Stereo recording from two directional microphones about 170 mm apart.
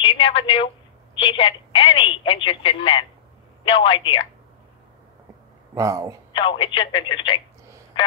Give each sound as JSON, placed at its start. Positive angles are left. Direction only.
{"t": 0.0, "sound": "a woman's voice", "side_deg": 30}
{"t": 5.8, "sound": "speech", "side_deg": -20}
{"t": 6.3, "sound": "a woman's voice", "side_deg": 30}